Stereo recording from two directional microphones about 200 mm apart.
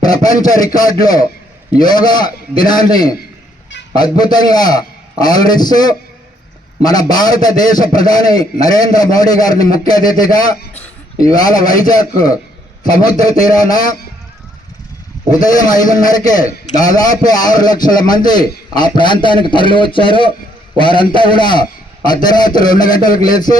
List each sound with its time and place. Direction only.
0.0 s a man's voice: 20° left (ahead or behind)
15.3 s a man's voice: 20° left (ahead or behind)